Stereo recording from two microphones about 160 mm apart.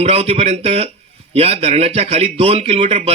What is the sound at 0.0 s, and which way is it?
Speech, 40° right (ahead or behind).